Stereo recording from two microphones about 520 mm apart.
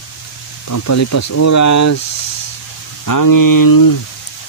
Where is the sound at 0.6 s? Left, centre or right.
Left.